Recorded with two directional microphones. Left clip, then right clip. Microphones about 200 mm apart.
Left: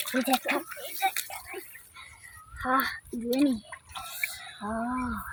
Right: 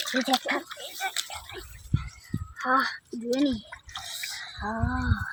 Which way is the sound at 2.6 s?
5° left (ahead or behind).